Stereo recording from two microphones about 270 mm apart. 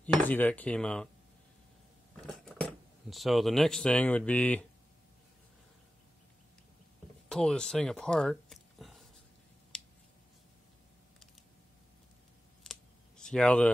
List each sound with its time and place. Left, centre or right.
0.0 s speech: centre
2.1 s speech: centre
7.2 s speech: centre
9.7 s a sound: centre
13.2 s speech: centre